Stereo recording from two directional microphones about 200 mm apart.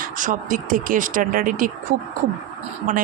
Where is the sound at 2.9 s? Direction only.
40° right (ahead or behind).